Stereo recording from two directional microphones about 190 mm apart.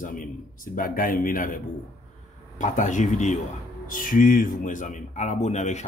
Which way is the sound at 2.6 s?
40° left (ahead or behind).